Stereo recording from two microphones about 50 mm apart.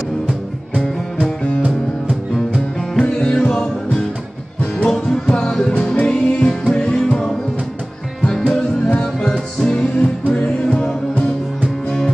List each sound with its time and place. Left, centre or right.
1.2 s music: left
3.0 s music: left
3.3 s music: centre
8.4 s music: left